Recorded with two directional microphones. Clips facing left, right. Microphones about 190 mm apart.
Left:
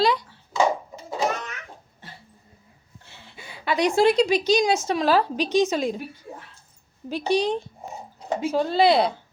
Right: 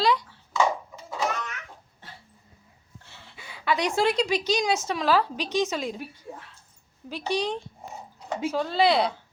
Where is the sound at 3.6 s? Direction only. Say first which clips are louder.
Left 5 dB; 15° left (ahead or behind).